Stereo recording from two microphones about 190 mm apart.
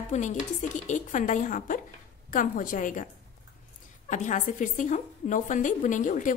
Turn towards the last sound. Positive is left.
turn(degrees=40)  # may be behind; listen again after turning